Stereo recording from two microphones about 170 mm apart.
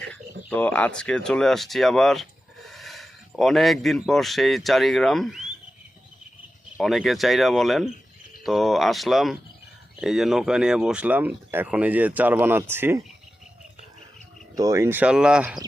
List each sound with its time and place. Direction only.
0.0 s speech: 5° left (ahead or behind)
6.7 s speech: centre (ahead or behind)
14.5 s speech: 20° right (ahead or behind)